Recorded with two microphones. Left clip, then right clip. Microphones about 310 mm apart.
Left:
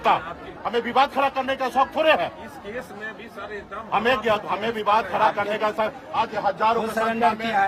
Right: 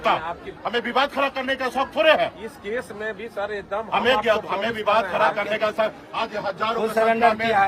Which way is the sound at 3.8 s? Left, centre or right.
Centre.